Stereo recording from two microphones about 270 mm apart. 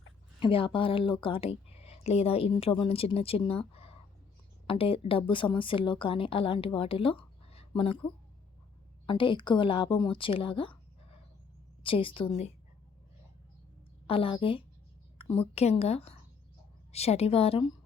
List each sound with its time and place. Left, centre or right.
0.3 s speech: centre
9.0 s a woman's voice: centre
14.1 s speech: centre